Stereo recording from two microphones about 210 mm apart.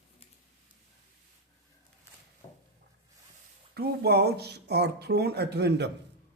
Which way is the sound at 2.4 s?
20° left (ahead or behind).